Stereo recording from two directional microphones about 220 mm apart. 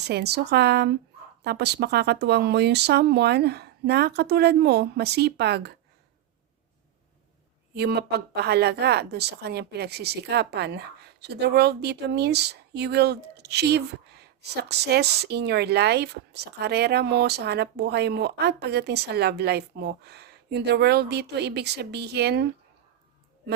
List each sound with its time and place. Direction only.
0.0 s speech: 50° right (ahead or behind)
7.8 s speech: 45° right (ahead or behind)